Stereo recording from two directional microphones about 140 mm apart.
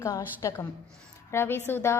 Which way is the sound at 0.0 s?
20° left (ahead or behind).